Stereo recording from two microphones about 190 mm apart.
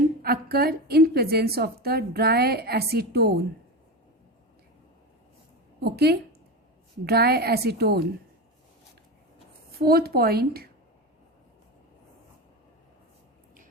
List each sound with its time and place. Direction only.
0.2 s a woman's voice: 55° right (ahead or behind)
5.8 s a woman's voice: 60° right (ahead or behind)
9.7 s a woman's voice: 50° right (ahead or behind)